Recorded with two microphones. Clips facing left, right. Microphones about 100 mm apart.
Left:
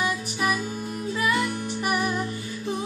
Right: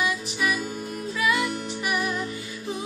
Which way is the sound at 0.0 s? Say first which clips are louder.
Even; 45° left (ahead or behind).